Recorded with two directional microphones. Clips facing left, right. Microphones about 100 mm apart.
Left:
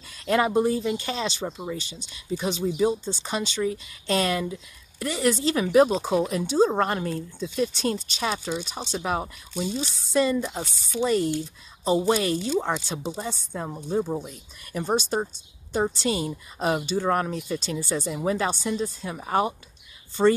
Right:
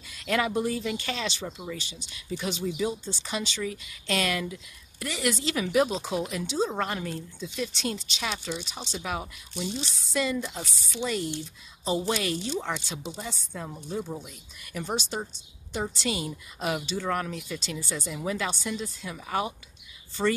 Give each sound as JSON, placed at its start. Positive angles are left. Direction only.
{"t": 0.1, "sound": "speech", "side_deg": 35}
{"t": 20.2, "sound": "a woman's voice", "side_deg": 30}